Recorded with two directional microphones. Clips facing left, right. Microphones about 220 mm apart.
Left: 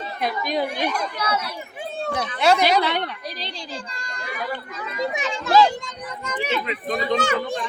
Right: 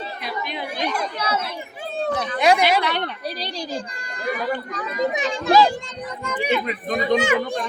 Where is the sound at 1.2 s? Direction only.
25° right (ahead or behind).